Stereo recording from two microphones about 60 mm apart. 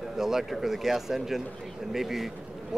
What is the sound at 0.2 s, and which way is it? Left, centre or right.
Speech, centre.